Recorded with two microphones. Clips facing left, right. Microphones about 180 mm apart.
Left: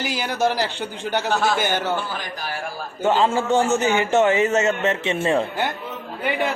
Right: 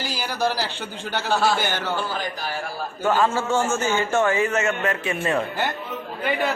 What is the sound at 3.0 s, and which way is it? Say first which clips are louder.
A man's voice: left 2 dB; 20° left (ahead or behind).